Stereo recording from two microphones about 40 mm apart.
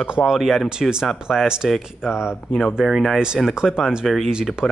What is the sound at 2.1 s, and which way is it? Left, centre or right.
Speech, left.